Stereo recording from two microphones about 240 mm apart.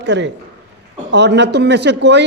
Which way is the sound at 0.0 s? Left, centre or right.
Right.